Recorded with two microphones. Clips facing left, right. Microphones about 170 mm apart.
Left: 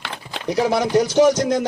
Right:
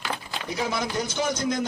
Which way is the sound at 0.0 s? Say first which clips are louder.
Left 4 dB; 80° left.